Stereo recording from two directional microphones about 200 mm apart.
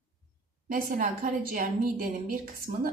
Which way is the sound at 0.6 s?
45° right (ahead or behind).